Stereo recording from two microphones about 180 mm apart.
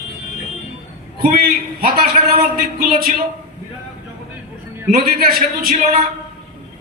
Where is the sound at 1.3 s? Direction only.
55° right (ahead or behind).